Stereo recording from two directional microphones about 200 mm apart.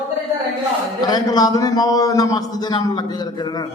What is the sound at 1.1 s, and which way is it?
A man's voice, 20° left (ahead or behind).